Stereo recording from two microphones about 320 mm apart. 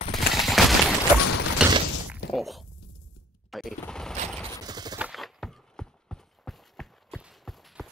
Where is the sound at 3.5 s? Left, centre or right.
Centre.